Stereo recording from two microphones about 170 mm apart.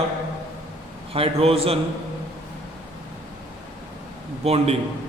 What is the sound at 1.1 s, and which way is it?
Speech, 35° right (ahead or behind).